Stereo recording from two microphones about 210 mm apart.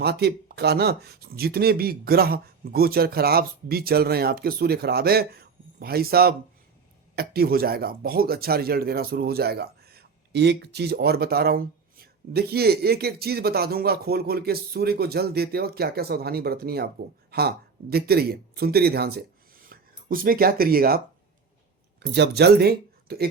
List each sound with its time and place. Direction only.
0.0 s speech: 50° right (ahead or behind)
22.0 s speech: 50° right (ahead or behind)